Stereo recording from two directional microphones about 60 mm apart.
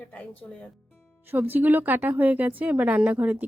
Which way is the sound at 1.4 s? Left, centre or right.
Right.